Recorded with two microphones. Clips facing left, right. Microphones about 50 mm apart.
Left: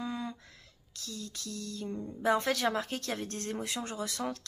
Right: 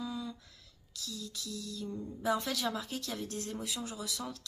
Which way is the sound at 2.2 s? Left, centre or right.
Left.